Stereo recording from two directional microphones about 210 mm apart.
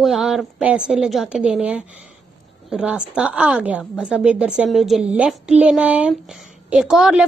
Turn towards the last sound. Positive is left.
turn(degrees=-5)  # may be behind; listen again after turning